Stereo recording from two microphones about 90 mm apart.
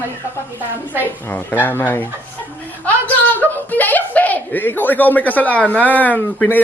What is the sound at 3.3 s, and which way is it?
A woman's voice, 20° left (ahead or behind).